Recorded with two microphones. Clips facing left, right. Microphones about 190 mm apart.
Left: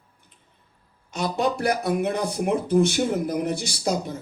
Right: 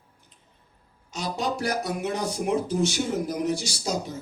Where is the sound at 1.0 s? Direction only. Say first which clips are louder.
Left 5 dB; 55° left (ahead or behind).